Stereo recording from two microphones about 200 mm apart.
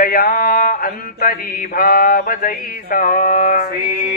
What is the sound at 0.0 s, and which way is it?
Mantra, 50° left (ahead or behind).